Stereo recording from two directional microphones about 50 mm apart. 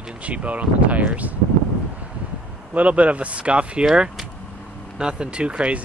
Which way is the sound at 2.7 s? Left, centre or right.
Right.